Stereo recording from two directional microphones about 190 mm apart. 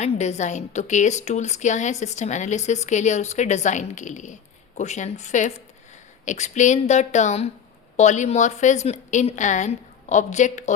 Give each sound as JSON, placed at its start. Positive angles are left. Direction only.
{"t": 0.0, "sound": "a woman's voice", "side_deg": 35}